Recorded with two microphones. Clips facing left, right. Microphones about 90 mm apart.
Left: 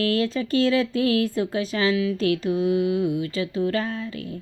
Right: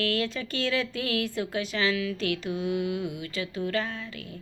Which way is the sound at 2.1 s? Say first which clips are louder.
Left 7 dB; 35° left (ahead or behind).